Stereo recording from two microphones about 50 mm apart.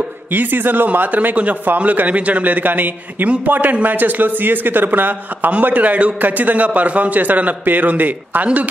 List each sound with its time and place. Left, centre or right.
0.3 s speech: right